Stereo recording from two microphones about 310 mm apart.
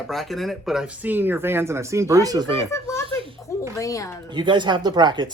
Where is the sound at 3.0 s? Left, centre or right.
Centre.